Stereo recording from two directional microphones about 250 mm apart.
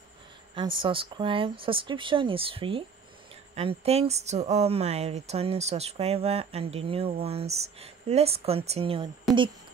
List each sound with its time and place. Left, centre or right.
0.6 s speech: centre